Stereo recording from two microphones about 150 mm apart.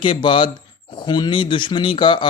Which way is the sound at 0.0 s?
35° left (ahead or behind).